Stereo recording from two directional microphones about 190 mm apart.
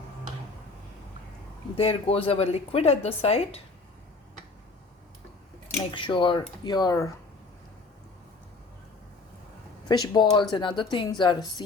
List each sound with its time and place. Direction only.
1.7 s speech: 30° left (ahead or behind)
5.9 s speech: 25° left (ahead or behind)
9.9 s speech: 25° left (ahead or behind)